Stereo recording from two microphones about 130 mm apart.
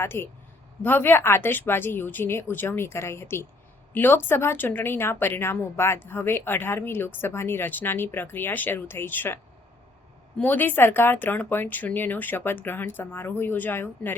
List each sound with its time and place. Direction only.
0.0 s a woman's voice: 20° left (ahead or behind)